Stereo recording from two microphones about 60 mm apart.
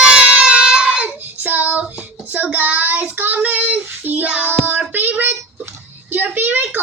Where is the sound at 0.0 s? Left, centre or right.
Centre.